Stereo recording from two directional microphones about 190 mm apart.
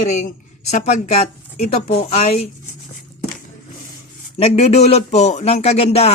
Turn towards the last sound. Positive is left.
turn(degrees=35)  # may be behind; listen again after turning